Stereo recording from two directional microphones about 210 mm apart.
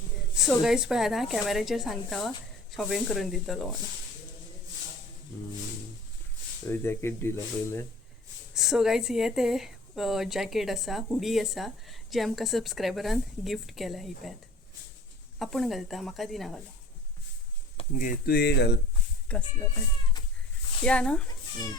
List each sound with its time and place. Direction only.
0.4 s a woman's voice: centre (ahead or behind)
6.7 s speech: 10° left (ahead or behind)
8.5 s a woman's voice: centre (ahead or behind)
15.4 s a woman's voice: centre (ahead or behind)
17.7 s speech: 40° left (ahead or behind)
19.3 s speech: 5° left (ahead or behind)
20.8 s a woman's voice: 5° left (ahead or behind)